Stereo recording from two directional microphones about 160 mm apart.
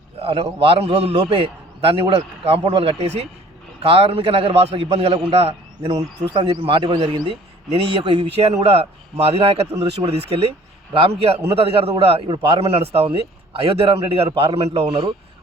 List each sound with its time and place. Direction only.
0.2 s a man's voice: 35° right (ahead or behind)